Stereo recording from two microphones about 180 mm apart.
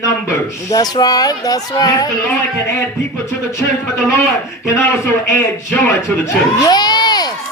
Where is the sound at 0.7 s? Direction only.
20° left (ahead or behind).